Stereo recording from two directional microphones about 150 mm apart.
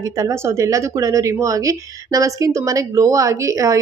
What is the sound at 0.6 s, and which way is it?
A woman's voice, 20° right (ahead or behind).